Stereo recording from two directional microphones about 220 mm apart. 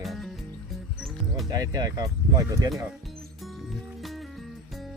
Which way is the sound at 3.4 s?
Centre (ahead or behind).